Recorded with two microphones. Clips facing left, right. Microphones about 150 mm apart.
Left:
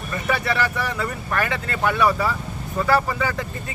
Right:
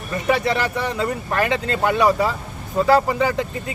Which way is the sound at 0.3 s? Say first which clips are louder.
Right 3 dB; 20° right (ahead or behind).